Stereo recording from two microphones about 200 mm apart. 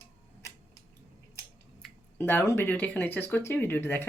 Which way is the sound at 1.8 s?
10° left (ahead or behind).